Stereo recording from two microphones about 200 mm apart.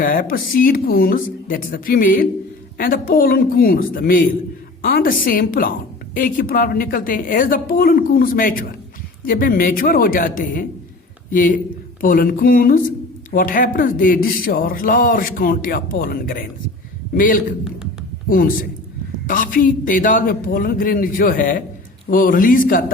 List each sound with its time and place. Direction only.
0.0 s speech: 45° left (ahead or behind)